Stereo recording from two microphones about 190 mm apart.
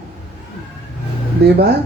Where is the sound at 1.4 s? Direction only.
60° right (ahead or behind).